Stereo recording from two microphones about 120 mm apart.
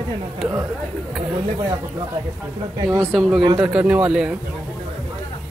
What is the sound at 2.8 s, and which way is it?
Speech, 25° right (ahead or behind).